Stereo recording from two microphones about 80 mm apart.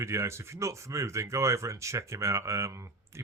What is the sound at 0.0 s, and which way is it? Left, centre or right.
Speech, right.